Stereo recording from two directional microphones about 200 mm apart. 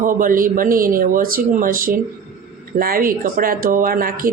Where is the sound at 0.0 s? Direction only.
45° right (ahead or behind).